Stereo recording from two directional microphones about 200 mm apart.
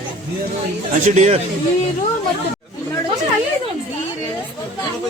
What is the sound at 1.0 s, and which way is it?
Speech, 35° right (ahead or behind).